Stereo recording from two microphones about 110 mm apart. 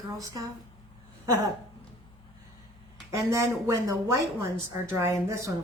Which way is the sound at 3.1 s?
25° right (ahead or behind).